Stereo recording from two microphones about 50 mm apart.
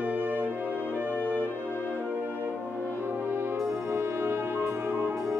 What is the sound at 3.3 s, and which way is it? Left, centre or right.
Music, right.